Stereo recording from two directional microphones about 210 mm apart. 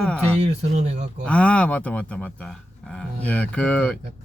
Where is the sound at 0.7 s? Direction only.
30° right (ahead or behind).